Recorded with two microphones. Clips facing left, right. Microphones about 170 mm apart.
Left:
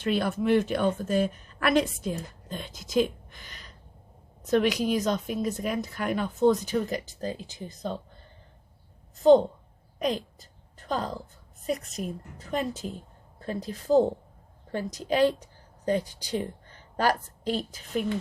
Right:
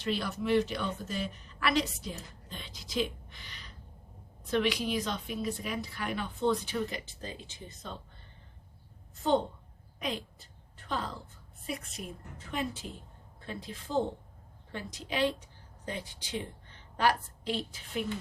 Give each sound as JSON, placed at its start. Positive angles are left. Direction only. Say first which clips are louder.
{"t": 0.0, "sound": "a woman's voice", "louder": "left 7 dB", "side_deg": 50}
{"t": 10.0, "sound": "a sound", "louder": "left 8 dB", "side_deg": 40}
{"t": 11.6, "sound": "a woman's voice", "louder": "left 8 dB", "side_deg": 40}